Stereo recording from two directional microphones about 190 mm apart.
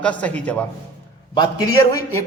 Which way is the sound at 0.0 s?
5° left (ahead or behind).